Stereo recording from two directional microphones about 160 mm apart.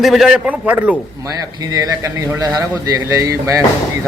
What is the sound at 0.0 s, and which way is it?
Speech, centre (ahead or behind).